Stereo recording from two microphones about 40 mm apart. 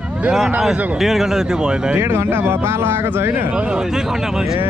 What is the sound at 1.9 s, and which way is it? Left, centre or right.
Speech, right.